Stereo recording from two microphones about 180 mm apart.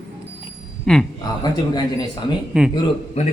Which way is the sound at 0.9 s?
5° left (ahead or behind).